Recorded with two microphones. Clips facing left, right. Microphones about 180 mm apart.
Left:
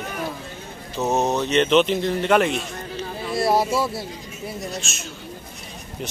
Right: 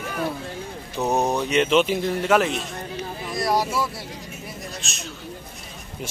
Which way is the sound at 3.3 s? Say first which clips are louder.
Left 3 dB; 30° left (ahead or behind).